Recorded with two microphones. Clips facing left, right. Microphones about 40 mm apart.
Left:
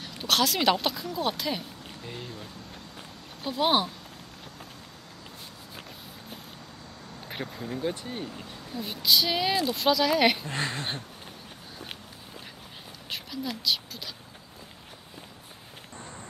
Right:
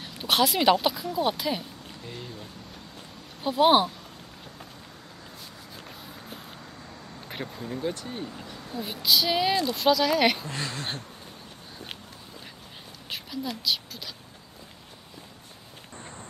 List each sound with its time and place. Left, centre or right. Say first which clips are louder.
0.0 s speech: right 2 dB; centre
3.4 s speech: right 5 dB; centre
7.2 s speech: even; centre
8.7 s speech: even; centre
10.4 s speech: left 2 dB; left
13.1 s a woman's voice: right 1 dB; centre